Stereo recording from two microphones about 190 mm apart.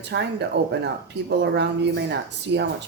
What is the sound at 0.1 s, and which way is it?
Speech, 65° right (ahead or behind).